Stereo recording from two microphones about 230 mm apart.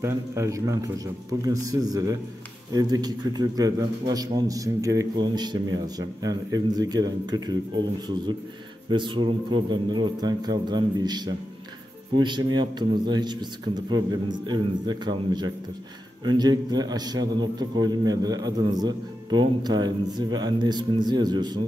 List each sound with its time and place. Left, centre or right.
0.0 s a man's voice: centre
8.9 s a man's voice: right